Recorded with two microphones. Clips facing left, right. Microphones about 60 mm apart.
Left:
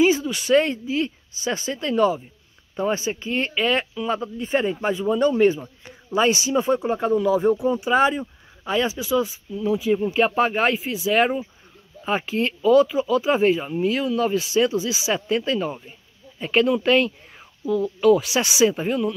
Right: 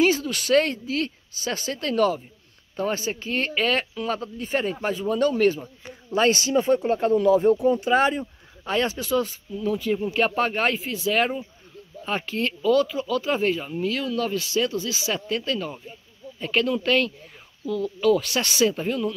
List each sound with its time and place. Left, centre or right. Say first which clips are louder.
0.0 s speech: left 2 dB; centre